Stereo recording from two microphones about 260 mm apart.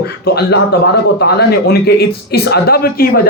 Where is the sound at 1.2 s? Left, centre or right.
Left.